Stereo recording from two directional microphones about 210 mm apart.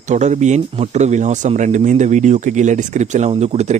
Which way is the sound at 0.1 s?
35° right (ahead or behind).